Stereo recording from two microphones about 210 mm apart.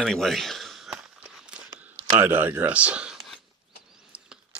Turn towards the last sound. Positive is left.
turn(degrees=-5)  # may be behind; listen again after turning